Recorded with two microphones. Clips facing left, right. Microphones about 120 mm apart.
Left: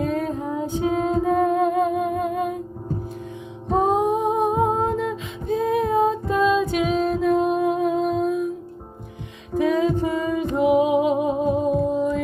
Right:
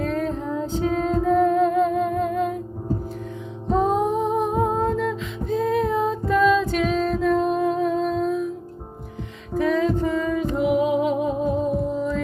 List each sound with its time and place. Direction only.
0.0 s music: 15° left (ahead or behind)
3.9 s music: 15° left (ahead or behind)
9.6 s music: 15° left (ahead or behind)